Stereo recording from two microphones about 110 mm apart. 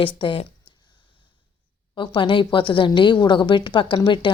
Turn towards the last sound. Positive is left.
turn(degrees=45)  # may be behind; listen again after turning